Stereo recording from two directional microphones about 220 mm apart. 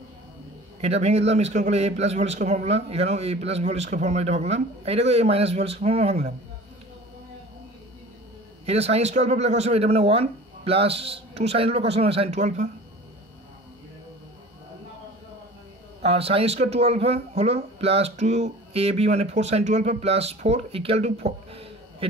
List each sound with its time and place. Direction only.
0.7 s speech: 30° right (ahead or behind)
8.6 s speech: 30° right (ahead or behind)
16.0 s speech: 25° right (ahead or behind)